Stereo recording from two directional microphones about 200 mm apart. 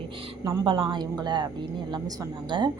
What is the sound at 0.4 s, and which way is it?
A woman's voice, 25° right (ahead or behind).